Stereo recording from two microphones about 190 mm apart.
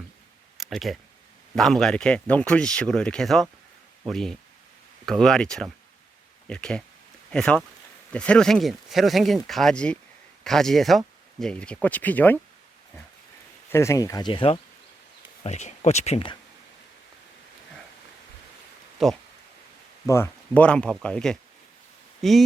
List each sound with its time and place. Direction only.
0.5 s a sound: centre (ahead or behind)
1.5 s speech: centre (ahead or behind)
13.7 s speech: 15° left (ahead or behind)
19.0 s speech: centre (ahead or behind)
20.1 s speech: 10° left (ahead or behind)